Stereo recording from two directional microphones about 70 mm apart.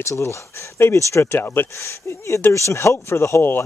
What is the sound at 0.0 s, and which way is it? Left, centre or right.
Speech, left.